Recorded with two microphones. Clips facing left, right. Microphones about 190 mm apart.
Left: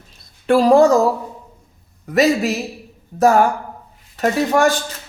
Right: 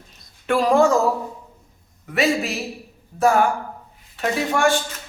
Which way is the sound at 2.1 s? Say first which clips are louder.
Left 5 dB; 40° left (ahead or behind).